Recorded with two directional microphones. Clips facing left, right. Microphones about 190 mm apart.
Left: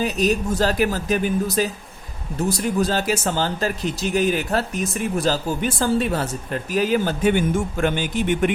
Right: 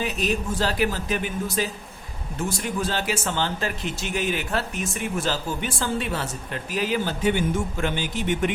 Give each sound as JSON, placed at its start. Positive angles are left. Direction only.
{"t": 0.0, "sound": "speech", "side_deg": 40}